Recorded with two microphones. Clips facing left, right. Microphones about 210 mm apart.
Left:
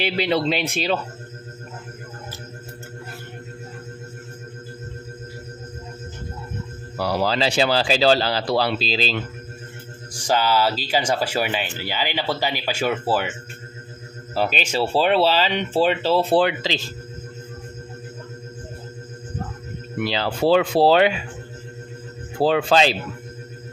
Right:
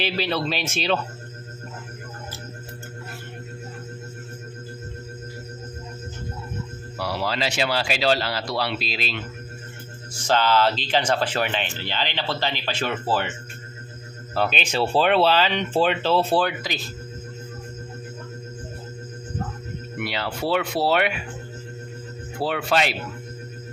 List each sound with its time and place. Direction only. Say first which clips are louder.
0.0 s speech: left 4 dB; 15° left (ahead or behind)
7.2 s speech: left 5 dB; 30° left (ahead or behind)
10.1 s speech: even; 10° left (ahead or behind)
14.6 s speech: left 1 dB; 10° left (ahead or behind)
20.1 s speech: left 7 dB; 25° left (ahead or behind)
22.4 s speech: left 6 dB; 30° left (ahead or behind)